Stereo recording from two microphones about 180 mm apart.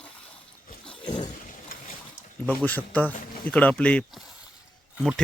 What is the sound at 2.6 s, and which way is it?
A man's voice, 10° left (ahead or behind).